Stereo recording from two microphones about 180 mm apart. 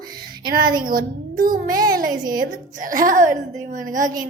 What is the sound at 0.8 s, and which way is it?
Speech, 55° right (ahead or behind).